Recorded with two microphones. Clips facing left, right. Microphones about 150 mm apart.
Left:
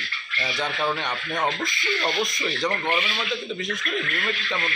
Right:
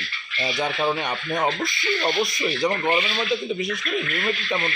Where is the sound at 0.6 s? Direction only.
10° right (ahead or behind).